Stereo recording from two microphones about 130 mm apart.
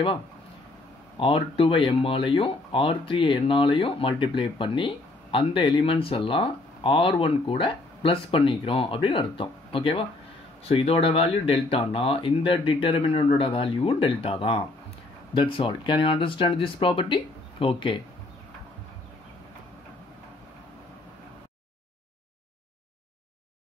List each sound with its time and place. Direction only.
1.2 s speech: 45° left (ahead or behind)